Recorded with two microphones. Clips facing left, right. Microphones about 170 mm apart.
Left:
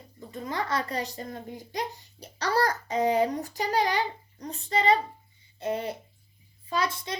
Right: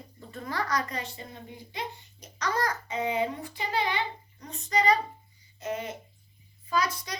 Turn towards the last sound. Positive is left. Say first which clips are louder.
# even
turn(degrees=25)  # may be behind; listen again after turning